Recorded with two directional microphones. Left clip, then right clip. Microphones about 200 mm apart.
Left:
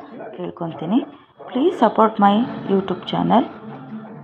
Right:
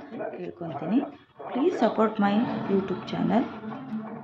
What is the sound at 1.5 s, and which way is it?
A woman's voice, 20° left (ahead or behind).